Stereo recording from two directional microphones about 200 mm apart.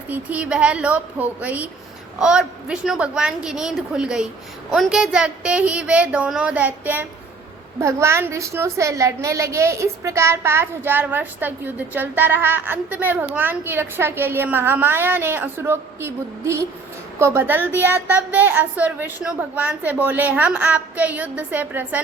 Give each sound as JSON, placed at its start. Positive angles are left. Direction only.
{"t": 0.1, "sound": "a woman's voice", "side_deg": -5}